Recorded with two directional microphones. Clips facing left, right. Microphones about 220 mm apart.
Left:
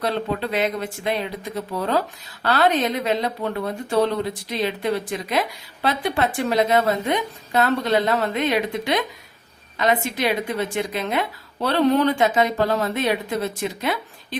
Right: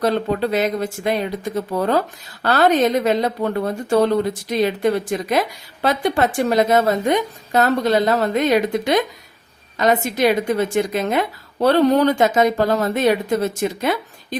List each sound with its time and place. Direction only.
0.0 s a woman's voice: 45° right (ahead or behind)